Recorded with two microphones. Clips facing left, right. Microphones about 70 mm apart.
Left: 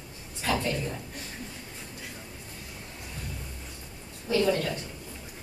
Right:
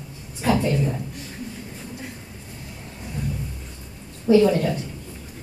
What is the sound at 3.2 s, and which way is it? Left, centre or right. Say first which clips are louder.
Thunder: right 13 dB; right.